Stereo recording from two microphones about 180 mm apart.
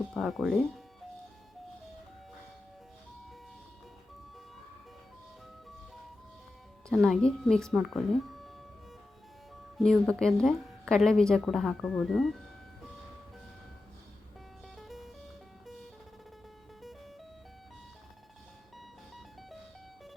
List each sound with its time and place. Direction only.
0.1 s a woman's voice: centre (ahead or behind)
6.8 s a woman's voice: 5° left (ahead or behind)
9.7 s a woman's voice: centre (ahead or behind)
14.8 s music: centre (ahead or behind)
19.1 s music: centre (ahead or behind)